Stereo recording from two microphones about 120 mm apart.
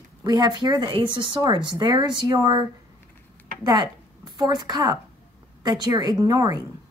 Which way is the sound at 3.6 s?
35° right (ahead or behind).